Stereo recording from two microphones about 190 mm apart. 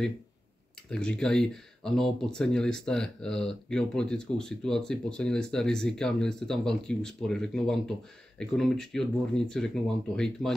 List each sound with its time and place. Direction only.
0.8 s speech: 5° left (ahead or behind)